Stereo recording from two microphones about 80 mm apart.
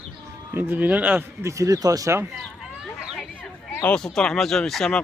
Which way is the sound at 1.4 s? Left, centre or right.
Right.